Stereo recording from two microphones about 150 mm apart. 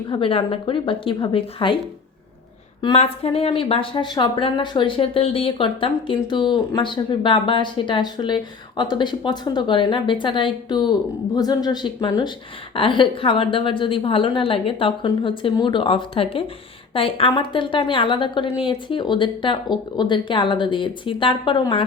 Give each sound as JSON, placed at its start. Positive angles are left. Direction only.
{"t": 0.1, "sound": "a woman's voice", "side_deg": 35}
{"t": 2.8, "sound": "a woman's voice", "side_deg": 40}